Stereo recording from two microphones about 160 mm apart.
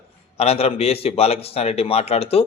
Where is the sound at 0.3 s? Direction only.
40° left (ahead or behind).